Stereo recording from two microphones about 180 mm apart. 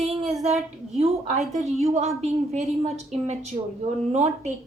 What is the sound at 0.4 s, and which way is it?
A woman's voice, 35° right (ahead or behind).